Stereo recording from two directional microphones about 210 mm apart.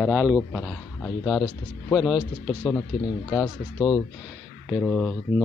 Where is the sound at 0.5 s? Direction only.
5° left (ahead or behind).